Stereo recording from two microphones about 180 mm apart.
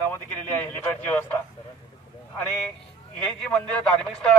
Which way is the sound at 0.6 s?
10° left (ahead or behind).